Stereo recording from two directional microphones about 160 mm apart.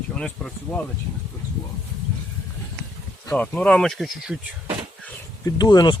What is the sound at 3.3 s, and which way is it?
Speech, 10° left (ahead or behind).